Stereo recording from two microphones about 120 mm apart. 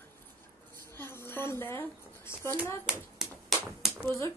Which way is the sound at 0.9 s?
20° left (ahead or behind).